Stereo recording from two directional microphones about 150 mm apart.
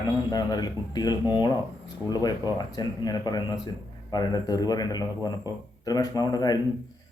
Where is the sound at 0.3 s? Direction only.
25° left (ahead or behind).